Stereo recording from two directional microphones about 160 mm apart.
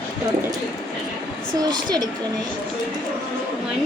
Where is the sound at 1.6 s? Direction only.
25° right (ahead or behind).